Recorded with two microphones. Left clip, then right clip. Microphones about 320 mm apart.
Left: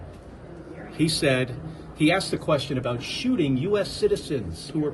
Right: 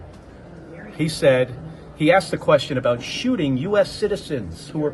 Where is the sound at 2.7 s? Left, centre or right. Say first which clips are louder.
Right 8 dB; right.